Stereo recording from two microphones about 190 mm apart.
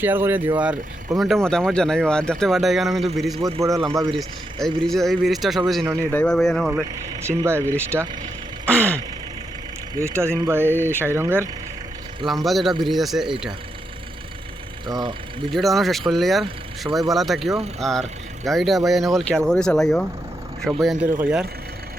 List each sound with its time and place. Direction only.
0.0 s speech: 10° right (ahead or behind)
3.4 s speech: 20° right (ahead or behind)
4.6 s speech: centre (ahead or behind)
7.3 s speech: 15° right (ahead or behind)
8.6 s a sound: 5° left (ahead or behind)
9.9 s speech: 15° right (ahead or behind)
12.2 s speech: centre (ahead or behind)
14.8 s speech: 25° right (ahead or behind)
15.4 s speech: centre (ahead or behind)